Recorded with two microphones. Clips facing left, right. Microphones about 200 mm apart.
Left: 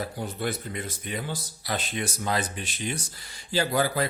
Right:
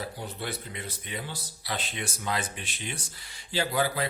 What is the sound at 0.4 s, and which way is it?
Speech, 45° left (ahead or behind).